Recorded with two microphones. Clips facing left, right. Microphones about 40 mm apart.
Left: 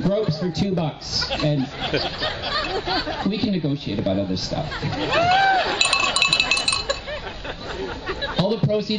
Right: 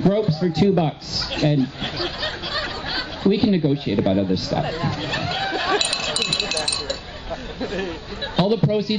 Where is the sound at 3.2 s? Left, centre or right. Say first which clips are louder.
Right 10 dB; centre.